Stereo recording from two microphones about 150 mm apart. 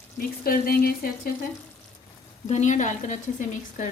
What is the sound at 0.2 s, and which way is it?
Speech, 80° left.